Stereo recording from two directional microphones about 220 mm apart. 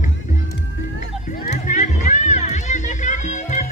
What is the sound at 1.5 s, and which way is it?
Music, 35° left (ahead or behind).